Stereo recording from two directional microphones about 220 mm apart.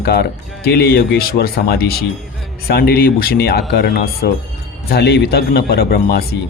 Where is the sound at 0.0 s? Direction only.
45° left (ahead or behind).